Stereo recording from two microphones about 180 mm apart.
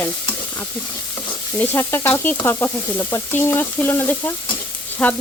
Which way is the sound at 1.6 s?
10° left (ahead or behind).